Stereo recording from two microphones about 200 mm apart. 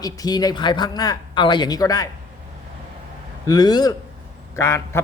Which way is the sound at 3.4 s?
20° left (ahead or behind).